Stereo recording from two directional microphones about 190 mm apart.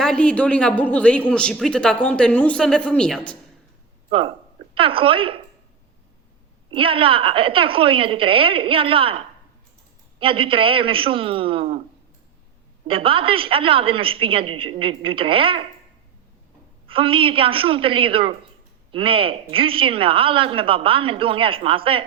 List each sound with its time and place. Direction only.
0.0 s a man's voice: 5° left (ahead or behind)
4.7 s speech: 30° right (ahead or behind)
6.7 s speech: 30° right (ahead or behind)
12.9 s speech: 30° right (ahead or behind)
16.8 s speech: 30° right (ahead or behind)